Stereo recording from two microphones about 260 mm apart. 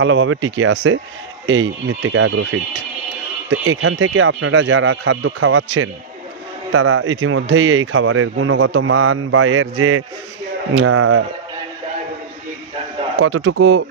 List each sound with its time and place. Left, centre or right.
0.0 s speech: right
13.2 s speech: right